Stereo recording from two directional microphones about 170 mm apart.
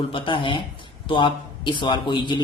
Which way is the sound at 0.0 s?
30° left (ahead or behind).